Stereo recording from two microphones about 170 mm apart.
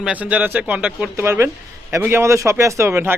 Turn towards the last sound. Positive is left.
turn(degrees=-15)  # may be behind; listen again after turning